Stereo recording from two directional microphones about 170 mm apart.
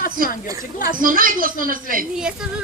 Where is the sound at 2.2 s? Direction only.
5° right (ahead or behind).